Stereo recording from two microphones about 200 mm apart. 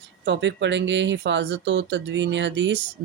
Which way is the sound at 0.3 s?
60° right (ahead or behind).